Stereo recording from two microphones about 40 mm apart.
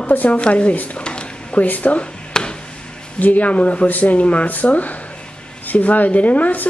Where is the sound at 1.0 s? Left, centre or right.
Left.